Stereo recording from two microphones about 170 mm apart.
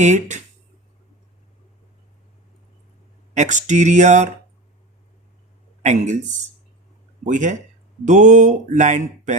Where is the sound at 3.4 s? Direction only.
45° right (ahead or behind).